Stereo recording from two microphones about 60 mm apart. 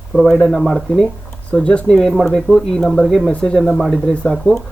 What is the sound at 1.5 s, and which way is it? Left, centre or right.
Speech, centre.